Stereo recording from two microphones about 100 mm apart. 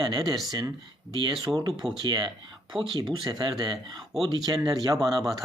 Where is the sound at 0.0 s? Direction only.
40° right (ahead or behind).